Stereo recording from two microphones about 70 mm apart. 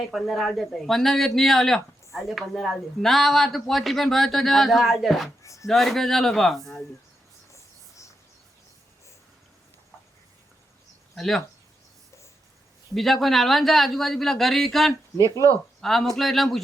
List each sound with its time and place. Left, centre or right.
0.1 s speech: centre
5.4 s speech: left
5.6 s speech: centre
7.5 s cricket: left
11.1 s speech: centre
12.9 s speech: centre